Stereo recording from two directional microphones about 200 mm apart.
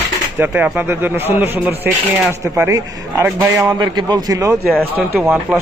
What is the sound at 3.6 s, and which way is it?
Speech, 20° right (ahead or behind).